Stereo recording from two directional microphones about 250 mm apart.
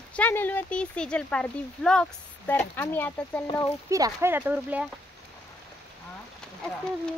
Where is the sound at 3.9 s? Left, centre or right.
Centre.